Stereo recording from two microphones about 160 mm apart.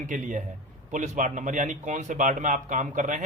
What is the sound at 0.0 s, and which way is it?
A man's voice, 50° right (ahead or behind).